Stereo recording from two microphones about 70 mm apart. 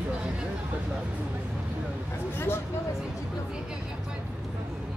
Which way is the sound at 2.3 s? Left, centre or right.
Left.